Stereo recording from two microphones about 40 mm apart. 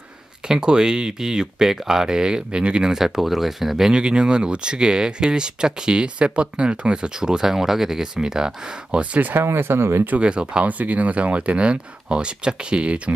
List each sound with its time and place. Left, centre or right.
0.5 s speech: centre
3.9 s speech: right
7.2 s speech: centre
8.9 s speech: right
9.4 s speech: right
10.2 s speech: right
10.7 s speech: right